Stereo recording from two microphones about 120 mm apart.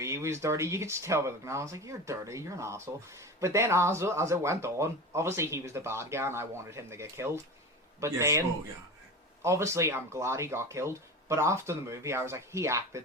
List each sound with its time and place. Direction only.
0.0 s speech: 25° right (ahead or behind)